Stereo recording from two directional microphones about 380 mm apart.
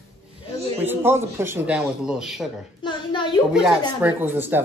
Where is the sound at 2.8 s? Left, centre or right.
Centre.